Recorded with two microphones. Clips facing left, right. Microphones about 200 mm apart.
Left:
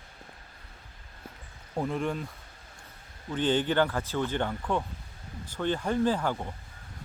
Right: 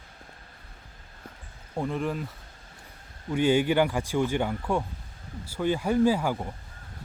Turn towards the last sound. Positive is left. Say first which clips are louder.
# right 3 dB
turn(degrees=-10)  # may be behind; listen again after turning